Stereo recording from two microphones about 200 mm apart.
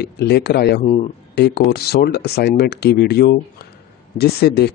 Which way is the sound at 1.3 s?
55° left (ahead or behind).